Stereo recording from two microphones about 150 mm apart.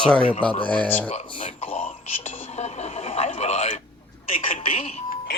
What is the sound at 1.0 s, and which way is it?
Speech, 40° left (ahead or behind).